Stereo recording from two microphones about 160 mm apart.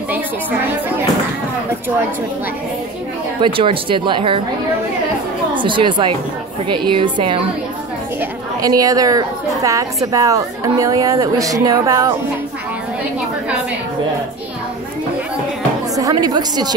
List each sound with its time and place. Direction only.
3.3 s speech: 30° right (ahead or behind)
5.5 s speech: 30° right (ahead or behind)
8.2 s a woman's voice: 20° right (ahead or behind)
16.0 s speech: 25° right (ahead or behind)